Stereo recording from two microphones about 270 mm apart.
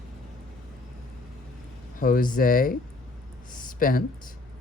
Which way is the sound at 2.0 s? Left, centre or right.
Left.